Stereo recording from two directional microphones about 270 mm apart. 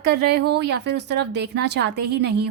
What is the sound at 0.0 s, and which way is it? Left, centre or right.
A woman's voice, right.